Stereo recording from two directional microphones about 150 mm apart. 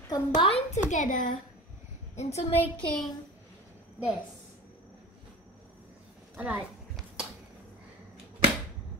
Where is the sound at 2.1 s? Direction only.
45° left (ahead or behind).